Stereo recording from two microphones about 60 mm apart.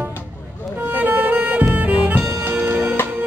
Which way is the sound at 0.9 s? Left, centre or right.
Right.